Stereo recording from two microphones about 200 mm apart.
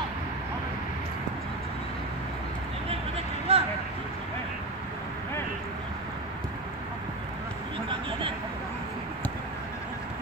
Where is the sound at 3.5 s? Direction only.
30° right (ahead or behind).